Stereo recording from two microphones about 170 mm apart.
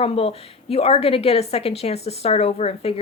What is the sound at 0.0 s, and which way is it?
A woman's voice, 35° left (ahead or behind).